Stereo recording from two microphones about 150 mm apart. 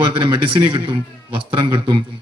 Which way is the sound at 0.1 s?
35° right (ahead or behind).